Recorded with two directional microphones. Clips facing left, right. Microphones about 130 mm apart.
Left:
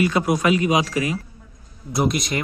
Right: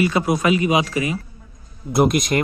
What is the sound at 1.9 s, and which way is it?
Speech, 50° right (ahead or behind).